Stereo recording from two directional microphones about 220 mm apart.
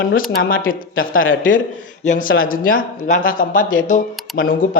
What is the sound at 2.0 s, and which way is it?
Speech, 35° left (ahead or behind).